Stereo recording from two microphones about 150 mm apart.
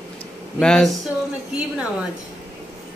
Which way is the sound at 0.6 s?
5° left (ahead or behind).